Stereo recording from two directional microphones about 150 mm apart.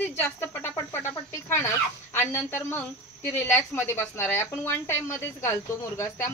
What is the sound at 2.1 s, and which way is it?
Speech, 15° left (ahead or behind).